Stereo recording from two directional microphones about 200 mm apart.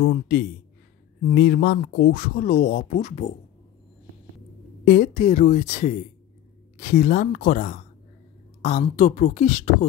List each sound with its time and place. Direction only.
0.0 s speech: 55° left (ahead or behind); by 3.3 s 35° left (ahead or behind)
4.8 s speech: 45° left (ahead or behind)